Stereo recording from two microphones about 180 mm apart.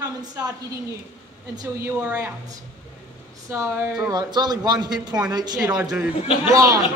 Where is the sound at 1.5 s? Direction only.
20° right (ahead or behind).